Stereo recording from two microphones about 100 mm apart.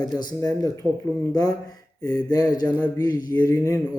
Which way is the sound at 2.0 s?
40° left (ahead or behind).